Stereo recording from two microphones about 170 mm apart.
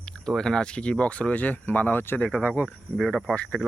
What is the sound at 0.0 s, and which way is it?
Speech, 5° left (ahead or behind).